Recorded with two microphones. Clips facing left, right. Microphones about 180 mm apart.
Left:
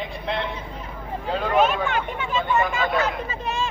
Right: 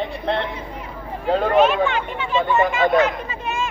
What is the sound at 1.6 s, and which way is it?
Speech, 45° left (ahead or behind).